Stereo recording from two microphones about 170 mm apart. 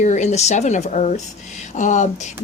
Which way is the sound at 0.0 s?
45° left (ahead or behind).